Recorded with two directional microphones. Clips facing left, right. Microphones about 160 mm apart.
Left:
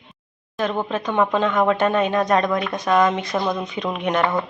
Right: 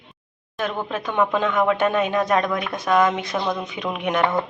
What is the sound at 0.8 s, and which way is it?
A woman's voice, 5° right (ahead or behind).